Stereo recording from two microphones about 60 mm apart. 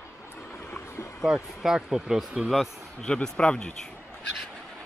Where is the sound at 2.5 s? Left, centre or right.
Centre.